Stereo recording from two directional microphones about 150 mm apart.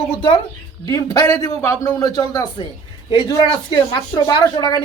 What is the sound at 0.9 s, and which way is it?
A man's voice, 25° left (ahead or behind).